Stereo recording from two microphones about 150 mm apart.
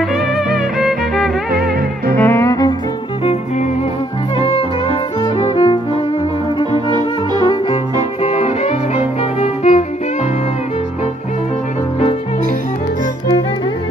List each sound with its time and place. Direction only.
0.7 s music: centre (ahead or behind)
2.1 s music: 15° left (ahead or behind)
5.2 s music: 35° left (ahead or behind)
6.7 s music: 30° right (ahead or behind)
8.2 s music: 40° left (ahead or behind)